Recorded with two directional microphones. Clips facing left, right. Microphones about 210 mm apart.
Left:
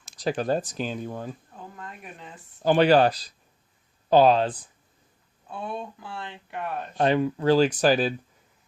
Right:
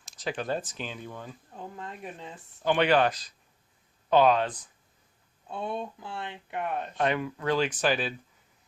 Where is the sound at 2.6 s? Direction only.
35° left (ahead or behind).